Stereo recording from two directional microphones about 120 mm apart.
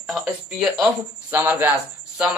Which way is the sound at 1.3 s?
15° right (ahead or behind).